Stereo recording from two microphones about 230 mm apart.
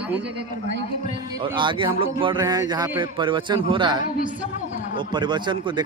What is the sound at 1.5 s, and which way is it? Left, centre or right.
Speech, right.